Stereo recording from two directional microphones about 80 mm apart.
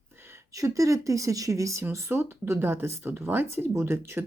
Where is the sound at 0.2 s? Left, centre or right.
Right.